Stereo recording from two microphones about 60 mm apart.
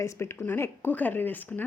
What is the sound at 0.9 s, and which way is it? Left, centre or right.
Speech, left.